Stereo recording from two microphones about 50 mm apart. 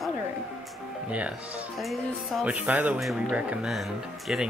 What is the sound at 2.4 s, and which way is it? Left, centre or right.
Speech, right.